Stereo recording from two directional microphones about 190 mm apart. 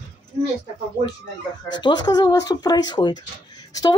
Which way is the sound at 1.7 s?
20° left (ahead or behind).